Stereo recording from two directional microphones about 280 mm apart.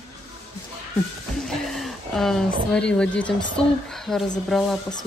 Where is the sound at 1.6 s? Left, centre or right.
Centre.